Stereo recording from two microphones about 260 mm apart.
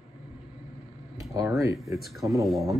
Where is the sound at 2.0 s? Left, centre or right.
Centre.